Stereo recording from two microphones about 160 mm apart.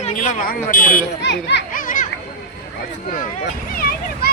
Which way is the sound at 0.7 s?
60° left (ahead or behind).